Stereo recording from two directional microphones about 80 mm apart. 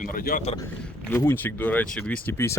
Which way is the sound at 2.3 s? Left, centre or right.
Left.